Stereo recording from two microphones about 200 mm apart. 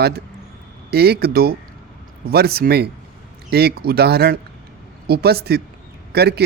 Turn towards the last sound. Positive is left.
turn(degrees=-55)  # may be behind; listen again after turning